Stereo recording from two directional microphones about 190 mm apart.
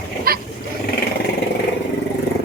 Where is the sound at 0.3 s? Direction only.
50° right (ahead or behind).